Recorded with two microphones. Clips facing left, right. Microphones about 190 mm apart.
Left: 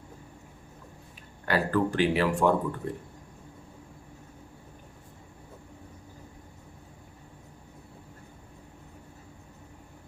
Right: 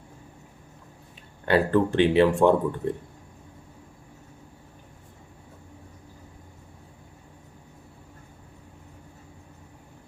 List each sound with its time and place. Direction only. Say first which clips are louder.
1.5 s speech: right 5 dB; 25° right (ahead or behind)